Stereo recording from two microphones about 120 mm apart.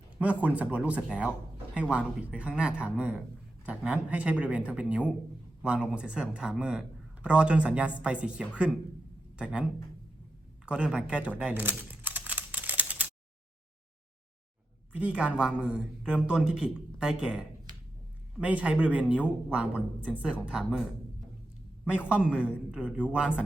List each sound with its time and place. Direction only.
0.2 s speech: 10° right (ahead or behind)
10.7 s computer keyboard: 5° right (ahead or behind)
14.9 s speech: 10° right (ahead or behind)
21.8 s speech: 10° right (ahead or behind)